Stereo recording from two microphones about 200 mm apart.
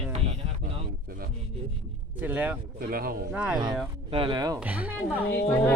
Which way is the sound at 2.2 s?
10° right (ahead or behind).